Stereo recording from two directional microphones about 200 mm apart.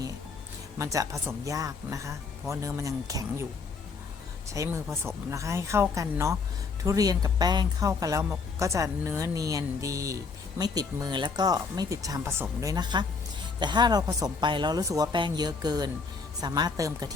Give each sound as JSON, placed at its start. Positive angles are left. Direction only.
{"t": 0.8, "sound": "speech", "side_deg": -15}
{"t": 4.4, "sound": "a woman's voice", "side_deg": -15}